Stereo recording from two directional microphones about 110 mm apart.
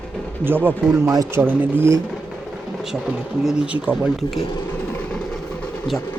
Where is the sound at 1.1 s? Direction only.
30° right (ahead or behind).